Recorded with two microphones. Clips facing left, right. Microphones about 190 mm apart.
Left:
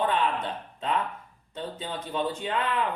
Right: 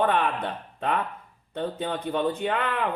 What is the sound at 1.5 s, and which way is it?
Speech, 60° right (ahead or behind).